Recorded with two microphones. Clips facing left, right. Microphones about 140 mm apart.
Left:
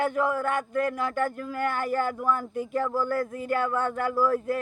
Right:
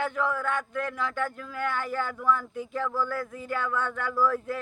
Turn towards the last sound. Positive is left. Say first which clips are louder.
# left 2 dB
turn(degrees=40)  # may be behind; listen again after turning